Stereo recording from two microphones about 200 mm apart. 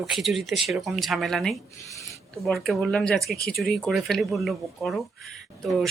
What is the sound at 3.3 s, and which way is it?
Speech, 50° left (ahead or behind).